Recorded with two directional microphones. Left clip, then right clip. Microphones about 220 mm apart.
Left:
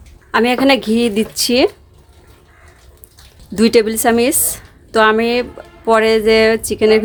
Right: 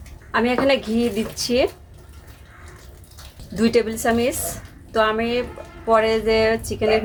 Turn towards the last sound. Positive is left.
turn(degrees=55)  # may be behind; listen again after turning